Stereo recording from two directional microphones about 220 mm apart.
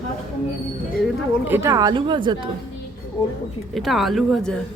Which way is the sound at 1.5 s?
10° right (ahead or behind).